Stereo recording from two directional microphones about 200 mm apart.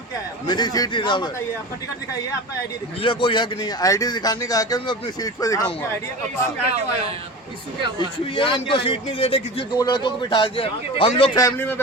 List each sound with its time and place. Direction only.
0.4 s speech: 20° left (ahead or behind)
3.0 s speech: 25° left (ahead or behind)
7.9 s speech: 25° left (ahead or behind)
11.3 s speech: 15° left (ahead or behind)